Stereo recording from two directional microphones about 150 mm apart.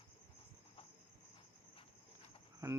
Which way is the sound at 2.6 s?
25° right (ahead or behind).